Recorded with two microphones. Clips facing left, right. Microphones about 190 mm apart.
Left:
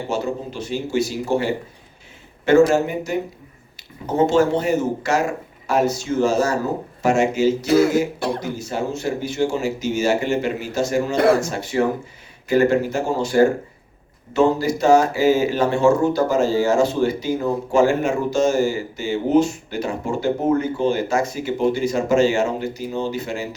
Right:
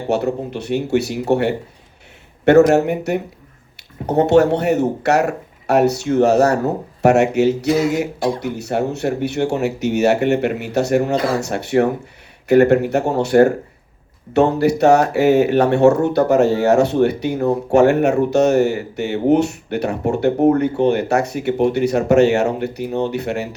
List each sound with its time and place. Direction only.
0.1 s speech: 65° right (ahead or behind)
7.7 s speech: 65° left (ahead or behind)
8.4 s speech: 65° right (ahead or behind)